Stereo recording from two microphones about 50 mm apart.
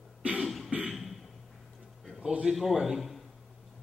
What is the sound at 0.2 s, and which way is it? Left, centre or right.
Cough, right.